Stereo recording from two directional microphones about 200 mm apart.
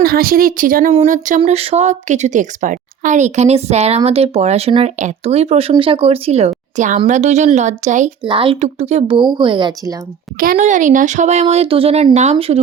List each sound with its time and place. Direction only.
0.0 s a woman's voice: 50° right (ahead or behind)
8.2 s speech: 25° right (ahead or behind)
10.4 s a woman's voice: 40° right (ahead or behind)